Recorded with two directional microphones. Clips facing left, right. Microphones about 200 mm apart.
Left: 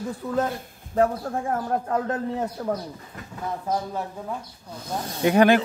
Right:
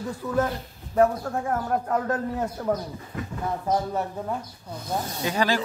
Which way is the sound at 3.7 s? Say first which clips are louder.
Right 3 dB; 5° right (ahead or behind).